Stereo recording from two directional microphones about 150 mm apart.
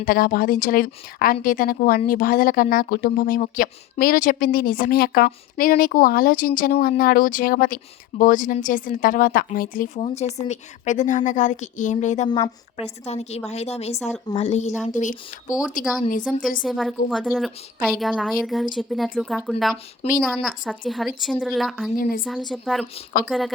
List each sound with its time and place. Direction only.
0.0 s a woman's voice: 70° left (ahead or behind)
10.0 s a woman's voice: 45° left (ahead or behind)
15.8 s a woman's voice: 5° right (ahead or behind)